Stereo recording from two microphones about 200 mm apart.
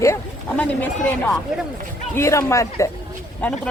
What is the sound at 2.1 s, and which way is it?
Speech, 15° left (ahead or behind).